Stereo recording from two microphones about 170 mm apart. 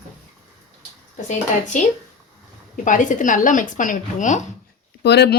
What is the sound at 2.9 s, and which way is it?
Speech, 50° left (ahead or behind).